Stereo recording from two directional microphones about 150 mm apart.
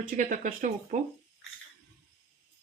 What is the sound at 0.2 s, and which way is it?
Speech, 60° right (ahead or behind).